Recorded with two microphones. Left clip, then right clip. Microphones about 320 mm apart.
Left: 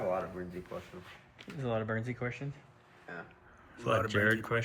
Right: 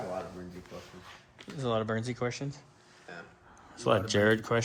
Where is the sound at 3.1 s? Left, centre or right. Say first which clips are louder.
Left 1 dB; left.